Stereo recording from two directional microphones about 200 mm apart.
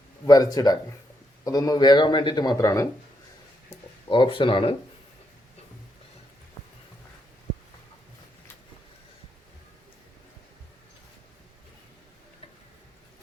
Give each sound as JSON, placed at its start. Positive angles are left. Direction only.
{"t": 0.3, "sound": "speech", "side_deg": 20}
{"t": 4.1, "sound": "speech", "side_deg": 25}